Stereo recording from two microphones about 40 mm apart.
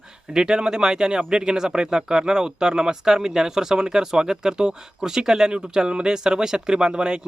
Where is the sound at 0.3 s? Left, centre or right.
Centre.